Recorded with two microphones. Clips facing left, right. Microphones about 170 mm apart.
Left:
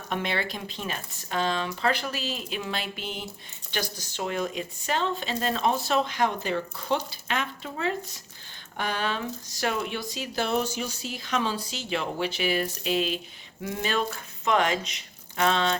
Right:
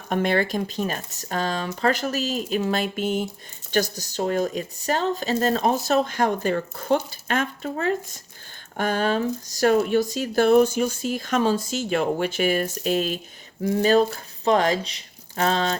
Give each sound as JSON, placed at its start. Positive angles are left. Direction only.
{"t": 0.1, "sound": "speech", "side_deg": -45}